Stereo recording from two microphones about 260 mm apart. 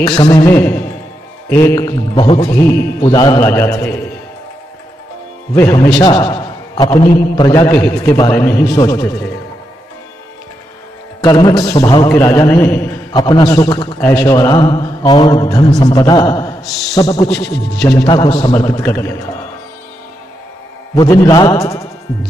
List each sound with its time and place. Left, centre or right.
0.1 s a man's voice: centre
5.5 s a man's voice: centre
11.1 s a man's voice: centre
20.9 s a man's voice: centre